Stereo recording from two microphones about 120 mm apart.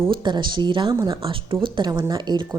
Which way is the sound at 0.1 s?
40° right (ahead or behind).